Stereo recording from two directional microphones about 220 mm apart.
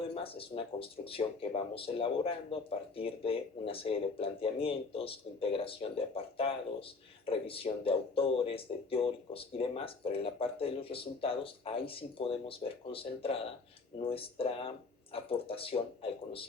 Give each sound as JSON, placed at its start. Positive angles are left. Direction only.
{"t": 0.1, "sound": "speech", "side_deg": 25}